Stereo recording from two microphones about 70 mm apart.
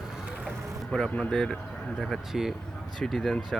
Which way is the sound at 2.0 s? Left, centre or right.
Centre.